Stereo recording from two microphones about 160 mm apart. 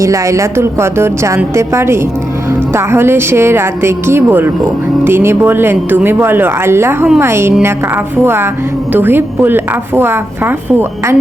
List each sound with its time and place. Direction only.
0.0 s a woman's voice: 20° right (ahead or behind)